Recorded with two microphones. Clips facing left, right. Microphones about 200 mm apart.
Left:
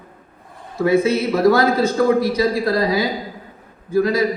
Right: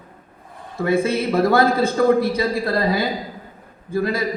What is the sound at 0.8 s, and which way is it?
A man's voice, 55° right (ahead or behind).